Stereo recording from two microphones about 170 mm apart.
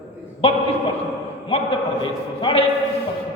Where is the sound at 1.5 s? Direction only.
35° left (ahead or behind).